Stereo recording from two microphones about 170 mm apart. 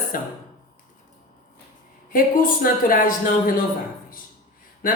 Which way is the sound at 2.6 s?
55° left (ahead or behind).